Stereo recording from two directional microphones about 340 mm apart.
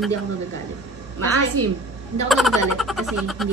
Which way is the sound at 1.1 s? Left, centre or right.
Right.